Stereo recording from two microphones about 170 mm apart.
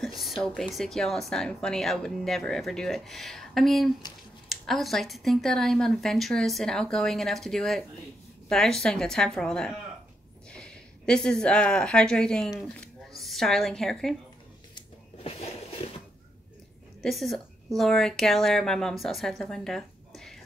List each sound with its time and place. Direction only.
0.0 s a woman's voice: centre (ahead or behind)
14.8 s a sound: 35° left (ahead or behind)
17.0 s a woman's voice: centre (ahead or behind)